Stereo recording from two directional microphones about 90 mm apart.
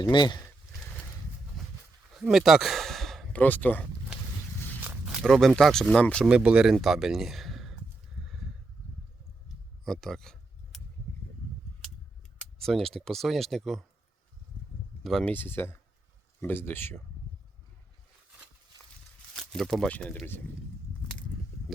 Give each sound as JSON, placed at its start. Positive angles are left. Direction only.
{"t": 0.0, "sound": "speech", "side_deg": 55}
{"t": 2.0, "sound": "sigh", "side_deg": -10}
{"t": 3.3, "sound": "speech", "side_deg": 20}
{"t": 4.8, "sound": "walk", "side_deg": -15}
{"t": 5.2, "sound": "speech", "side_deg": 5}
{"t": 6.2, "sound": "speech", "side_deg": -10}
{"t": 8.2, "sound": "a sound", "side_deg": 0}
{"t": 9.8, "sound": "a sound", "side_deg": 5}
{"t": 12.5, "sound": "speech", "side_deg": 5}
{"t": 15.2, "sound": "speech", "side_deg": 20}
{"t": 19.4, "sound": "speech", "side_deg": 0}
{"t": 19.9, "sound": "speech", "side_deg": 15}